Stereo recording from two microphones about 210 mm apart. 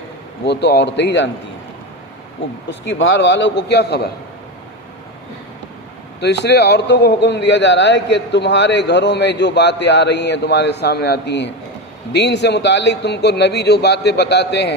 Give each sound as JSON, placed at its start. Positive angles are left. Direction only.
{"t": 0.4, "sound": "a man's voice", "side_deg": 55}
{"t": 2.6, "sound": "a man's voice", "side_deg": 60}
{"t": 6.1, "sound": "a man's voice", "side_deg": 55}